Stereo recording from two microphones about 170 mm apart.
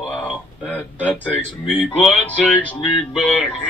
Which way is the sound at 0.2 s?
10° left (ahead or behind).